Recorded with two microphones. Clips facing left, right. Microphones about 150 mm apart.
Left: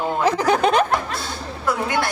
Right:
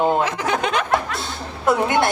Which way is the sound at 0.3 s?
35° left (ahead or behind).